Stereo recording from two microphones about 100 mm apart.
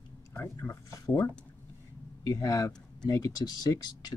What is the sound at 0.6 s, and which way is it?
Speech, 30° left (ahead or behind).